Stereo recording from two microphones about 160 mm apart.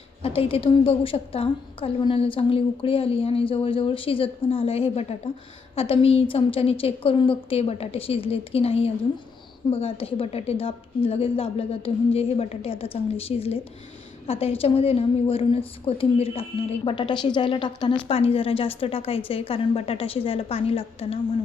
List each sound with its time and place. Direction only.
0.2 s a woman's voice: 35° left (ahead or behind)